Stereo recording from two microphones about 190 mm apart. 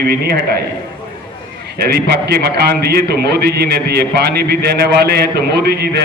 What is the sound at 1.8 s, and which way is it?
A man's voice, 55° right (ahead or behind).